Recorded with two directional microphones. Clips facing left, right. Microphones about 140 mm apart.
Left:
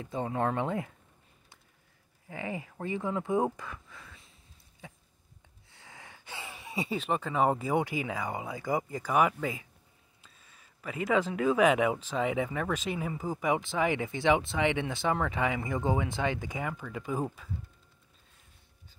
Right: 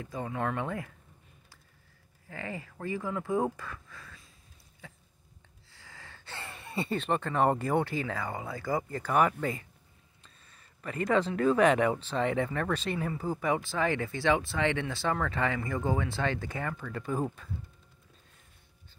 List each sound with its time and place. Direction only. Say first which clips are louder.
0.0 s speech: left 3 dB; 25° left (ahead or behind)
2.2 s speech: left 2 dB; 20° left (ahead or behind)
4.8 s a sound: left 2 dB; 20° left (ahead or behind)
5.7 s speech: left 1 dB; 20° left (ahead or behind)